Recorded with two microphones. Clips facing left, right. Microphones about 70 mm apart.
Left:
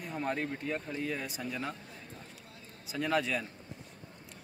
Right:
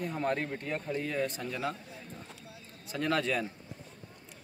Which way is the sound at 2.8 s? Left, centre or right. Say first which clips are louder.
Right 1 dB; centre.